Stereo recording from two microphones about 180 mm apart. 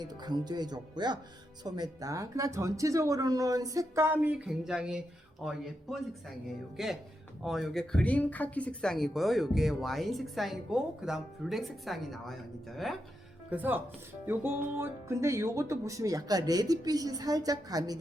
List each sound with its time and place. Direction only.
0.0 s speech: 25° right (ahead or behind); by 13.0 s centre (ahead or behind)
13.5 s speech: 10° right (ahead or behind)